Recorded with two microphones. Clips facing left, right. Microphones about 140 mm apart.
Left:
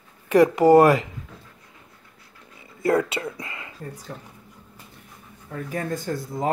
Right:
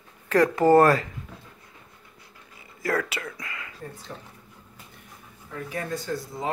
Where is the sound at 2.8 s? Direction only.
25° left (ahead or behind).